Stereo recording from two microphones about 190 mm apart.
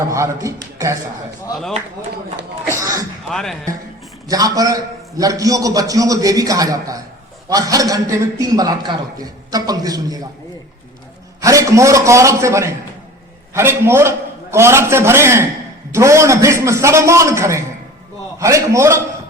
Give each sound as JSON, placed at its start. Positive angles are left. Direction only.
{"t": 0.1, "sound": "a man's voice", "side_deg": -15}
{"t": 2.7, "sound": "throat clearing", "side_deg": -15}
{"t": 3.2, "sound": "speech", "side_deg": 0}
{"t": 4.3, "sound": "a man's voice", "side_deg": -20}
{"t": 11.3, "sound": "a man's voice", "side_deg": -15}